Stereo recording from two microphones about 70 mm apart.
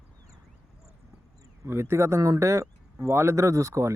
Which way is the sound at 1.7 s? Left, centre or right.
Right.